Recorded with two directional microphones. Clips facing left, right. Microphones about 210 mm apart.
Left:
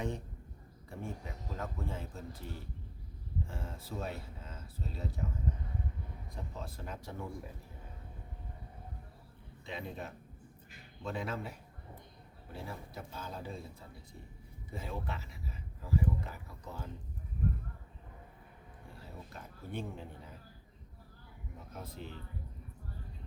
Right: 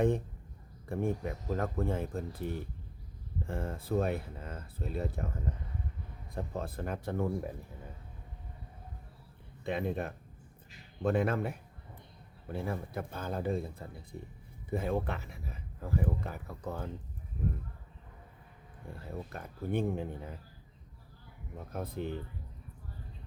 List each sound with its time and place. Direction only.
0.9 s speech: 55° right (ahead or behind)
6.3 s speech: 55° right (ahead or behind)
9.6 s speech: 55° right (ahead or behind)
12.5 s speech: 55° right (ahead or behind)
18.9 s speech: 55° right (ahead or behind)
21.6 s speech: 55° right (ahead or behind)